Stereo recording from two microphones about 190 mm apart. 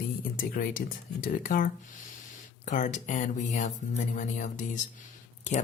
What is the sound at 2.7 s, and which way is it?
Speech, 40° left (ahead or behind).